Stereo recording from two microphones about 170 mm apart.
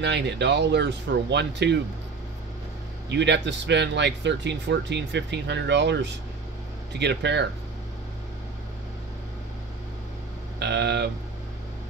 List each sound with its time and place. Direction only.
0.0 s speech: 90° right
3.1 s speech: 90° right
10.6 s speech: 90° right